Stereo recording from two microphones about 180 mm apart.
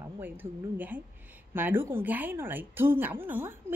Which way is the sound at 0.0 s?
10° right (ahead or behind).